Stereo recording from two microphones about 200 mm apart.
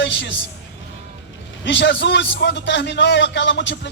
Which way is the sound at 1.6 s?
65° left (ahead or behind).